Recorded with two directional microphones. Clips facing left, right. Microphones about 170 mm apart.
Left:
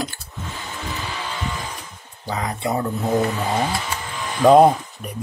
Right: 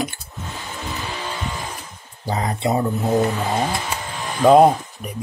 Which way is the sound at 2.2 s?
25° right (ahead or behind).